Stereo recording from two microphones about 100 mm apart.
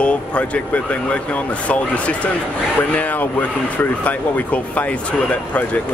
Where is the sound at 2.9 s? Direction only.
15° left (ahead or behind).